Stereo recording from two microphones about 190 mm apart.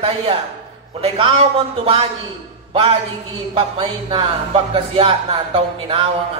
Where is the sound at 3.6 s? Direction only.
30° right (ahead or behind).